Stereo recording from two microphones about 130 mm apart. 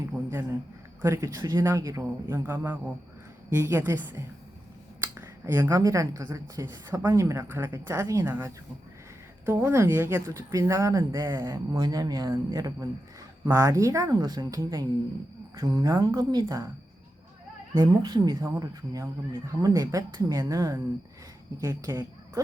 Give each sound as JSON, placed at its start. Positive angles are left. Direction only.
{"t": 0.0, "sound": "a sound", "side_deg": -20}
{"t": 1.0, "sound": "a woman's voice", "side_deg": -20}
{"t": 17.7, "sound": "speech", "side_deg": -30}
{"t": 18.4, "sound": "speech", "side_deg": -20}
{"t": 18.7, "sound": "speech", "side_deg": -30}